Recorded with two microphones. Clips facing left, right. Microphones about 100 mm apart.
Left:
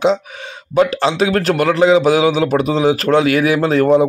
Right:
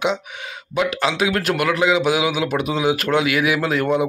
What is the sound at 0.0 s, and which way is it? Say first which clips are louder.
Speech: left 7 dB; 35° left (ahead or behind).